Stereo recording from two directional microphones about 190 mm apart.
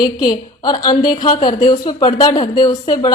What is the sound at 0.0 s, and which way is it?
Speech, 25° left (ahead or behind).